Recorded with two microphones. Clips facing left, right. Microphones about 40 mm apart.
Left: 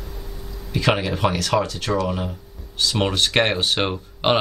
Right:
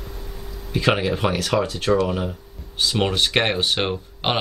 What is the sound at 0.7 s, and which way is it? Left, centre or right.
Speech, centre.